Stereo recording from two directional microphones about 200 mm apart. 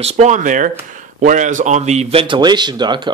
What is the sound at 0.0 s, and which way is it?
A man's voice, 35° right (ahead or behind).